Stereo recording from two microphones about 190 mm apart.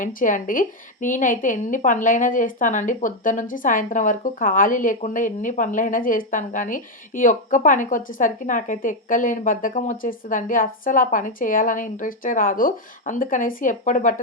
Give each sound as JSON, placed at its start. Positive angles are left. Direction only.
{"t": 0.0, "sound": "a woman's voice", "side_deg": 45}